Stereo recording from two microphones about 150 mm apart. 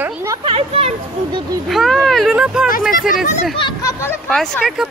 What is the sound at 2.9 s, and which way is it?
Speech, 65° left (ahead or behind).